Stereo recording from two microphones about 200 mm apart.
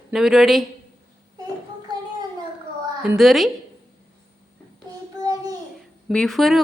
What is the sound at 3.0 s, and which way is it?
Speech, 5° right (ahead or behind).